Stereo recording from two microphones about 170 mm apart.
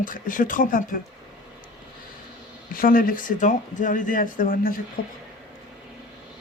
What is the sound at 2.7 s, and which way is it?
Speech, 55° left (ahead or behind).